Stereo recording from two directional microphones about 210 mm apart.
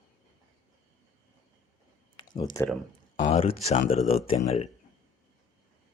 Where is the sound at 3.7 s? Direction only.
40° left (ahead or behind).